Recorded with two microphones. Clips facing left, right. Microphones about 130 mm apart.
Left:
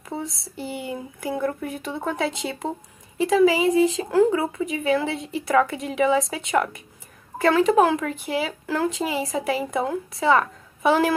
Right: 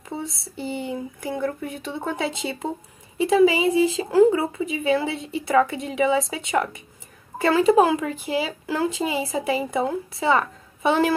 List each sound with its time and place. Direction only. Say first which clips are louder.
0.1 s speech: even; centre (ahead or behind)